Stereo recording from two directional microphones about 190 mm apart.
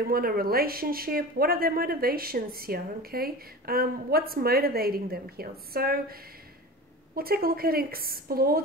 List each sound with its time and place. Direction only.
0.0 s speech: 50° right (ahead or behind)
7.2 s speech: 50° right (ahead or behind)